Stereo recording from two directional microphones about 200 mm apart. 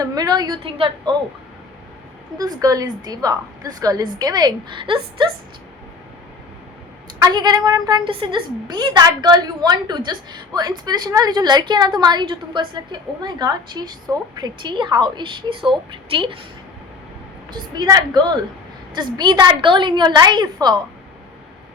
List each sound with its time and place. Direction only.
0.0 s a woman's voice: 20° right (ahead or behind)
2.4 s a woman's voice: 20° right (ahead or behind)
7.2 s a woman's voice: 20° right (ahead or behind)
17.5 s a woman's voice: 20° right (ahead or behind)